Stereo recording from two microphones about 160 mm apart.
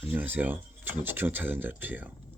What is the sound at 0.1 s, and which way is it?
Speech, 10° right (ahead or behind).